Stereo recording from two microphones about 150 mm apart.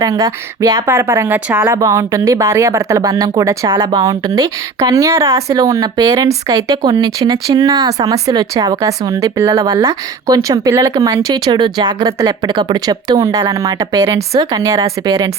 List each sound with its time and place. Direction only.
0.0 s speech: 20° right (ahead or behind)